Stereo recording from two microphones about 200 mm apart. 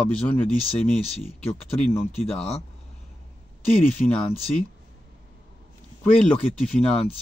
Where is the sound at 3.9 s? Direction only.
5° left (ahead or behind).